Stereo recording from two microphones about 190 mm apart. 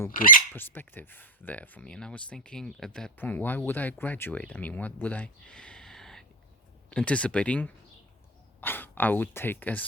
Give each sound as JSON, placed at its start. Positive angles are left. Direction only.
{"t": 0.1, "sound": "speech", "side_deg": 45}
{"t": 0.5, "sound": "speech", "side_deg": 10}